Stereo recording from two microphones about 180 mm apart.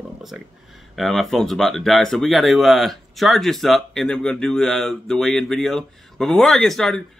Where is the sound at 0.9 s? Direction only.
Centre (ahead or behind).